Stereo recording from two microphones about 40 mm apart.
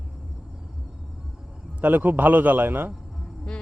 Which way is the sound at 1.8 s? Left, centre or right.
Right.